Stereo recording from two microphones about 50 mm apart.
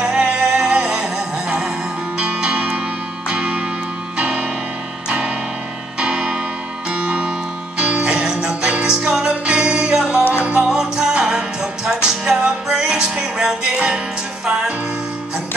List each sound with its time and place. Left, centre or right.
0.0 s music: centre
5.9 s music: centre
10.7 s music: centre